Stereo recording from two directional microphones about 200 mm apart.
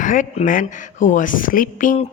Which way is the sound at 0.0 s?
40° left (ahead or behind).